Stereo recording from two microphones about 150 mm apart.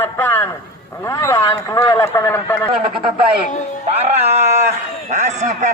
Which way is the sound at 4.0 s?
45° right (ahead or behind).